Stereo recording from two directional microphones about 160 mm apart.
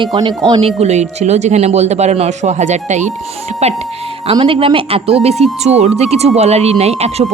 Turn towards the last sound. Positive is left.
turn(degrees=-40)  # may be behind; listen again after turning